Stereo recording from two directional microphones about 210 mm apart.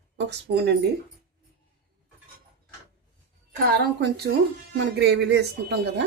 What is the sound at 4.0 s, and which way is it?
Speech, 50° right (ahead or behind).